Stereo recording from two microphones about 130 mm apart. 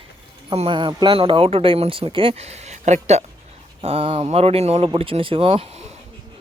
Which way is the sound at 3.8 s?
50° right (ahead or behind).